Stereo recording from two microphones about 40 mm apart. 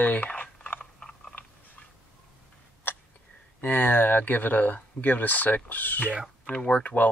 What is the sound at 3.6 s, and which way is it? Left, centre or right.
Speech, left.